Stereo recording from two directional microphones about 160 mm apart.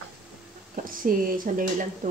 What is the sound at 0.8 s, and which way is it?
Speech, 60° right (ahead or behind).